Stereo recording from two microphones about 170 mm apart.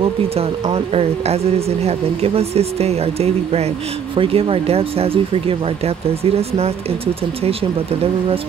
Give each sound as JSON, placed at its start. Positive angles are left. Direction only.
{"t": 0.4, "sound": "speech", "side_deg": -35}